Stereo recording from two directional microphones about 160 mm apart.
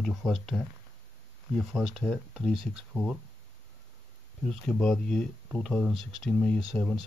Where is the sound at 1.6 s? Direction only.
Centre (ahead or behind).